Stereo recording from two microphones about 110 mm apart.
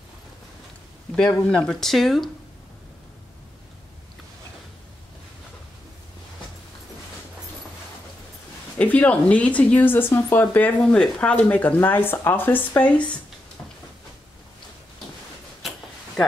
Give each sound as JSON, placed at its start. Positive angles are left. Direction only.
{"t": 1.1, "sound": "speech", "side_deg": 5}
{"t": 8.7, "sound": "speech", "side_deg": 15}